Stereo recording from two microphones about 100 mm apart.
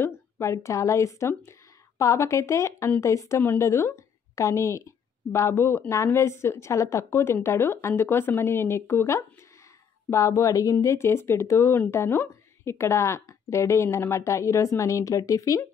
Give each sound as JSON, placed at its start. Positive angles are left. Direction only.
{"t": 0.0, "sound": "a woman's voice", "side_deg": 25}